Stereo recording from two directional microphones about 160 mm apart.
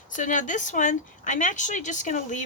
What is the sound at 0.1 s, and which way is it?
Speech, 50° left (ahead or behind).